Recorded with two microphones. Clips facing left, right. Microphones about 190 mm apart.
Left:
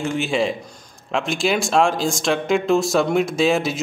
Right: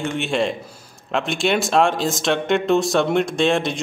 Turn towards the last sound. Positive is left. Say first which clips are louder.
# even
turn(degrees=5)  # may be behind; listen again after turning